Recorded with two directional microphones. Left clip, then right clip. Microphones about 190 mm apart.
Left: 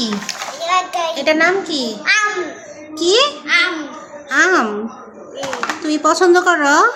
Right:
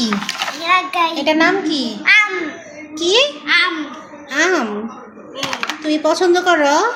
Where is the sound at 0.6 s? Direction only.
35° left (ahead or behind).